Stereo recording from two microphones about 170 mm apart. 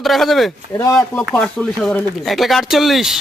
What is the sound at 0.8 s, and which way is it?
Speech, 20° left (ahead or behind).